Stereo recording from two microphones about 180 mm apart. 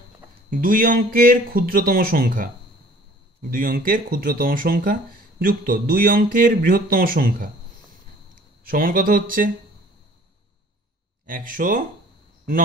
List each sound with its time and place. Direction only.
0.5 s speech: 50° right (ahead or behind)
11.2 s speech: 50° right (ahead or behind)